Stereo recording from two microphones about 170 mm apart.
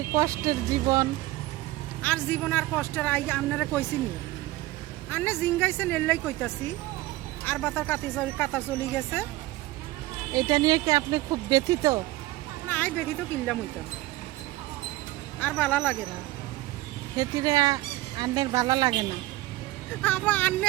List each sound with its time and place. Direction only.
0.1 s speech: 20° right (ahead or behind)
2.0 s speech: 10° left (ahead or behind)
5.1 s speech: 15° left (ahead or behind)
10.3 s speech: 20° right (ahead or behind)
12.6 s a sound: 10° left (ahead or behind)
15.4 s speech: 10° left (ahead or behind)
17.2 s speech: 20° right (ahead or behind)
20.0 s speech: 10° left (ahead or behind)